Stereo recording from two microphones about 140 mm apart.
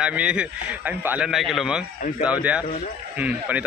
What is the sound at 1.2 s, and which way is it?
A man's voice, centre (ahead or behind).